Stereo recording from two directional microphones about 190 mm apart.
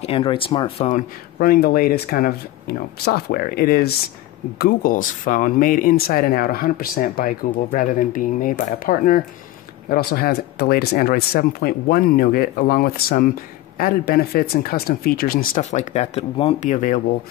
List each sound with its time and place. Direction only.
0.0 s speech: 30° left (ahead or behind)
0.8 s speech: 50° left (ahead or behind)